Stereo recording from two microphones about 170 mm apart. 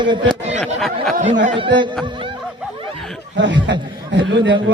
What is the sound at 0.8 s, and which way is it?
Speech, centre (ahead or behind).